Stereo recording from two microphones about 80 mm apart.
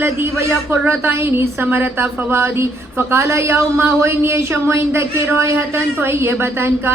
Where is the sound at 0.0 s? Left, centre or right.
Right.